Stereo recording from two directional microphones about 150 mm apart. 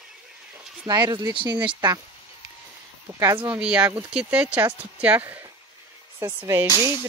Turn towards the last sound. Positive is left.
turn(degrees=30)  # may be behind; listen again after turning